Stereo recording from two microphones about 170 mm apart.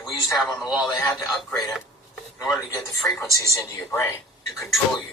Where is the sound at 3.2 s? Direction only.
20° left (ahead or behind).